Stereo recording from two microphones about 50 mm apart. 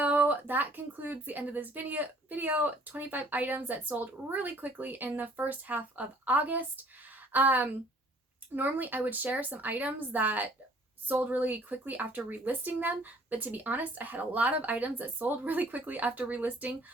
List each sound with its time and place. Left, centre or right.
0.0 s a woman's voice: right